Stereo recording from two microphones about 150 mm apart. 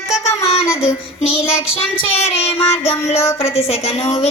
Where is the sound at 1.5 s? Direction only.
40° left (ahead or behind).